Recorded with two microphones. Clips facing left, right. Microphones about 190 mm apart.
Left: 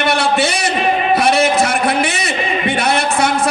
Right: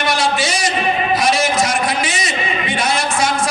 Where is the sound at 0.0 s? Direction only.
60° left (ahead or behind).